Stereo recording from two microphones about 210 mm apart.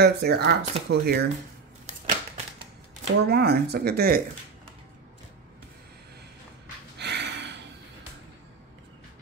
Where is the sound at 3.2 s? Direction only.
50° right (ahead or behind).